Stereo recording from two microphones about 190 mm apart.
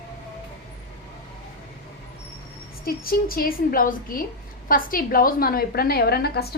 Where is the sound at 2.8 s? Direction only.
50° left (ahead or behind).